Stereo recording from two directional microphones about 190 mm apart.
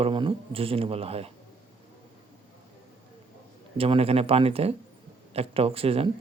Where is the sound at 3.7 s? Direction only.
30° right (ahead or behind).